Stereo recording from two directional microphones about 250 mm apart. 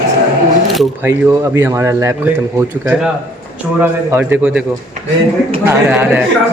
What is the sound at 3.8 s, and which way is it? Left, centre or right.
Speech, centre.